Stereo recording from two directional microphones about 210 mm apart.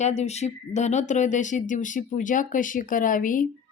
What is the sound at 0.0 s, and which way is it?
A woman's voice, 30° left (ahead or behind).